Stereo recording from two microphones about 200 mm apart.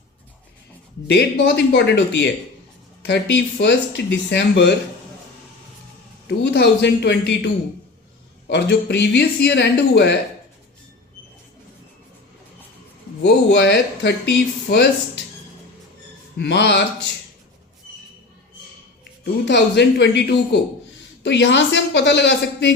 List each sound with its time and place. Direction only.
1.0 s speech: 55° left (ahead or behind)
6.2 s speech: 60° left (ahead or behind)
13.5 s speech: 55° left (ahead or behind)
16.4 s speech: 60° left (ahead or behind)
19.2 s speech: 60° left (ahead or behind)